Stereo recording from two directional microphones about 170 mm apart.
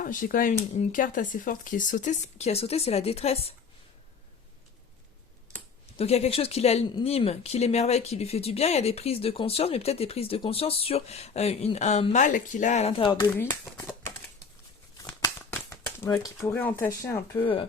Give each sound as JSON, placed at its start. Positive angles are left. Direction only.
{"t": 0.0, "sound": "speech", "side_deg": 55}
{"t": 2.4, "sound": "speech", "side_deg": 35}
{"t": 6.0, "sound": "speech", "side_deg": 35}
{"t": 13.3, "sound": "speech", "side_deg": 15}
{"t": 15.0, "sound": "shuffling cards", "side_deg": 20}
{"t": 17.4, "sound": "speech", "side_deg": 30}